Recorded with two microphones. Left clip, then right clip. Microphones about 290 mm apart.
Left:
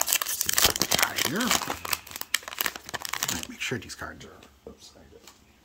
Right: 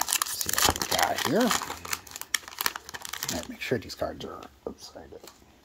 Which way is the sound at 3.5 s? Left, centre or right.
Centre.